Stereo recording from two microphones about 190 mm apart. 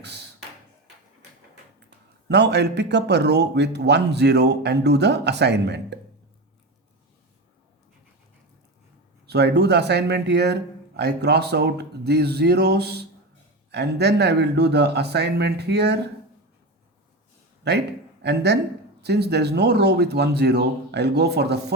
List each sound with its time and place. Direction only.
2.2 s speech: 65° right (ahead or behind)
9.2 s speech: 60° right (ahead or behind)
17.7 s speech: 65° right (ahead or behind)